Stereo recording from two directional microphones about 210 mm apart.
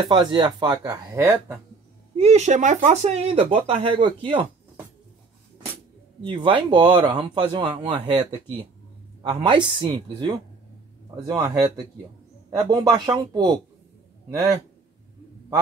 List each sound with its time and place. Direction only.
0.1 s speech: 20° right (ahead or behind)
2.1 s speech: 30° right (ahead or behind)
6.2 s speech: 25° right (ahead or behind)